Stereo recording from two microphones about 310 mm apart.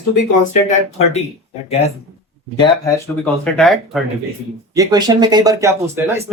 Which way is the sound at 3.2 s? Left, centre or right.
Centre.